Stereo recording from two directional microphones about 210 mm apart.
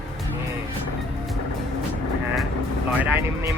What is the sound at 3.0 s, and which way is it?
Speech, 10° right (ahead or behind).